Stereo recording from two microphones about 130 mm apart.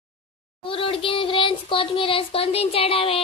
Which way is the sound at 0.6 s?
45° left (ahead or behind).